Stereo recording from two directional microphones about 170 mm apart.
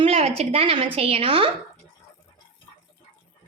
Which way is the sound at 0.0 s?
35° right (ahead or behind).